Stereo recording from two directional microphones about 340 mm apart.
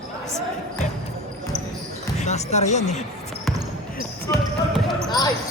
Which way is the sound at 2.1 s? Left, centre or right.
Centre.